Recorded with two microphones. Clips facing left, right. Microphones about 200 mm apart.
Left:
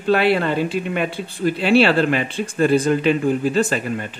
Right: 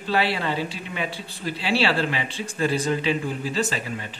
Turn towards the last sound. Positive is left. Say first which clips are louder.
# left 8 dB
turn(degrees=55)  # may be behind; listen again after turning